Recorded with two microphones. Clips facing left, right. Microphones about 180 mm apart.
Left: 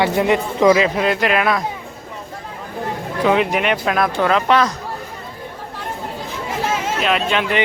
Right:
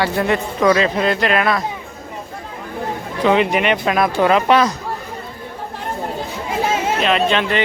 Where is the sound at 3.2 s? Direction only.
Centre (ahead or behind).